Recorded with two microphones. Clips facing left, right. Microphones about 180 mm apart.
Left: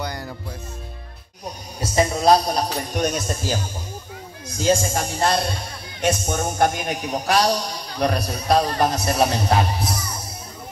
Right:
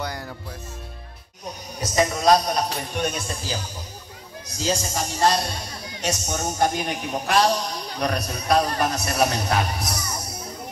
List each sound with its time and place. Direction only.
0.0 s music: centre (ahead or behind)
1.8 s a man's voice: 30° left (ahead or behind)